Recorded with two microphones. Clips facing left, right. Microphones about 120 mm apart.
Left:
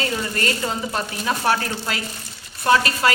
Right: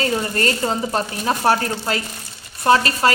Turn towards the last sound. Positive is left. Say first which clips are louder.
# right 2 dB
turn(degrees=-35)  # may be behind; listen again after turning